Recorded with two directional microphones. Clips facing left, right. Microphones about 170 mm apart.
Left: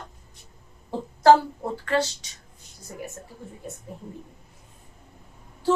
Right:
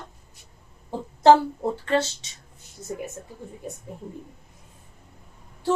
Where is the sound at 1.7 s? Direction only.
25° right (ahead or behind).